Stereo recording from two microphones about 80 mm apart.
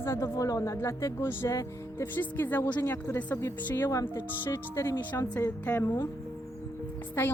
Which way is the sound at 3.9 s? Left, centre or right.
Left.